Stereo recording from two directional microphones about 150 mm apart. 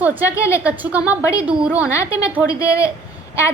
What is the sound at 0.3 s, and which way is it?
Speech, 20° left (ahead or behind).